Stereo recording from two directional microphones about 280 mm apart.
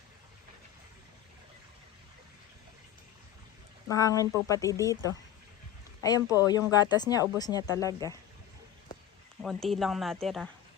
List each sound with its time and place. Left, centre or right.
3.8 s speech: centre
9.4 s speech: centre